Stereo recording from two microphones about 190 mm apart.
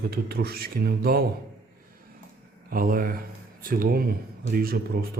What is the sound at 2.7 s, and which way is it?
Speech, 50° right (ahead or behind).